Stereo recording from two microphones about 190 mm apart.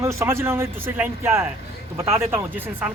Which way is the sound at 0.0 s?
15° right (ahead or behind).